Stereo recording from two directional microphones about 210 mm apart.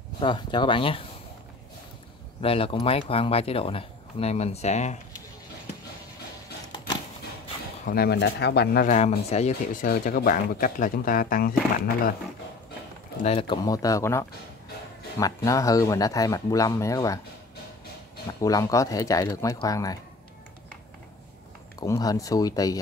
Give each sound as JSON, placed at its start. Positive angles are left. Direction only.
{"t": 0.2, "sound": "speech", "side_deg": 25}
{"t": 2.4, "sound": "speech", "side_deg": 25}
{"t": 7.8, "sound": "speech", "side_deg": 45}
{"t": 8.8, "sound": "speech", "side_deg": 35}
{"t": 13.2, "sound": "speech", "side_deg": 25}
{"t": 18.4, "sound": "speech", "side_deg": 15}
{"t": 21.7, "sound": "speech", "side_deg": 15}